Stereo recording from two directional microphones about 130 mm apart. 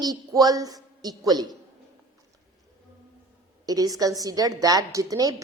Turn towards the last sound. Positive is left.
turn(degrees=-25)  # may be behind; listen again after turning